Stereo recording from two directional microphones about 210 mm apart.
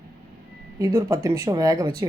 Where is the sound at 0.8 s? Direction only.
15° right (ahead or behind).